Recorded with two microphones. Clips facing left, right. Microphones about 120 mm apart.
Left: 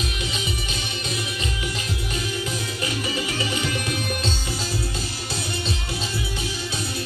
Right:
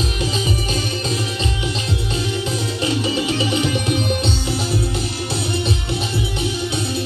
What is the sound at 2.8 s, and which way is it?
Music, 25° right (ahead or behind).